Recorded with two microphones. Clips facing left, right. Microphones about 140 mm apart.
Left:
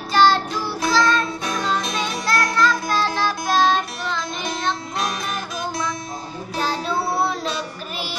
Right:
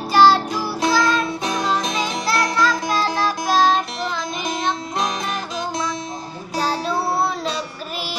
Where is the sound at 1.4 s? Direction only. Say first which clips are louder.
Right 2 dB; 30° right (ahead or behind).